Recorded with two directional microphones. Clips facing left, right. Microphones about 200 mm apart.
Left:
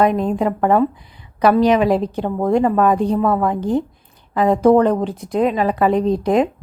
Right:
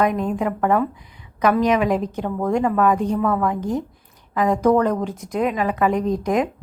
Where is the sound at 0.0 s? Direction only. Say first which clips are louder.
Left 4 dB; 30° left (ahead or behind).